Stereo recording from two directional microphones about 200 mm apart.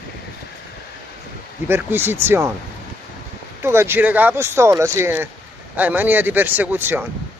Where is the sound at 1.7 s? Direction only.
10° right (ahead or behind).